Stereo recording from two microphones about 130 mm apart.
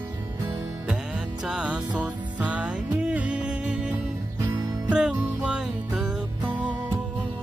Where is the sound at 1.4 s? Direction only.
5° right (ahead or behind).